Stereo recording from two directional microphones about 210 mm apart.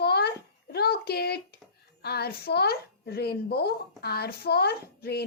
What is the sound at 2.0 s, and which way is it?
A woman's voice, 50° left (ahead or behind).